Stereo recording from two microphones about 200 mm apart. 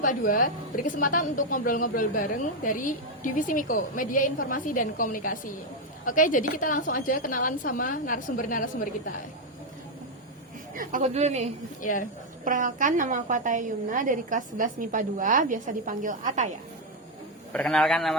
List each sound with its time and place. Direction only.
0.0 s a woman's voice: 45° left (ahead or behind)
10.8 s a woman's voice: 40° right (ahead or behind)
11.8 s speech: 40° left (ahead or behind)
12.5 s a woman's voice: 40° right (ahead or behind)
17.5 s a man's voice: 5° left (ahead or behind)